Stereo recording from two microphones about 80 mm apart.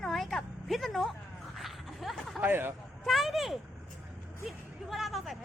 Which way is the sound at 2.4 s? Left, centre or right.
Right.